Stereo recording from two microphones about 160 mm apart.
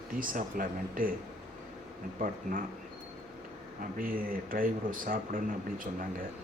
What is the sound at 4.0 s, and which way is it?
Speech, 60° right (ahead or behind).